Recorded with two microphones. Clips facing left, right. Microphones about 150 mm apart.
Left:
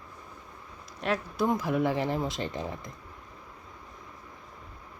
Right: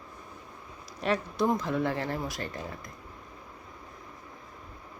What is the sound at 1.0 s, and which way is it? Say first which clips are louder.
Speech: right 1 dB; centre (ahead or behind).